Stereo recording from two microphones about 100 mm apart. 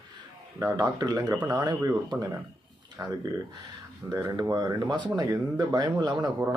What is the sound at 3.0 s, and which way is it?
Speech, 35° right (ahead or behind).